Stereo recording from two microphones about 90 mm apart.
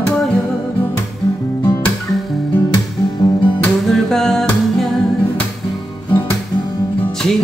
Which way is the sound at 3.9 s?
5° left (ahead or behind).